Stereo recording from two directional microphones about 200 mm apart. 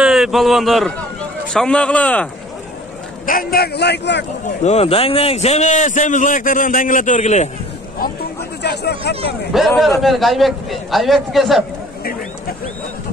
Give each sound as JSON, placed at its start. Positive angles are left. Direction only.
{"t": 0.0, "sound": "a man's voice", "side_deg": 0}
{"t": 3.3, "sound": "a man's voice", "side_deg": 45}
{"t": 4.6, "sound": "a man's voice", "side_deg": 30}
{"t": 8.6, "sound": "a man's voice", "side_deg": 55}
{"t": 9.5, "sound": "a man's voice", "side_deg": 0}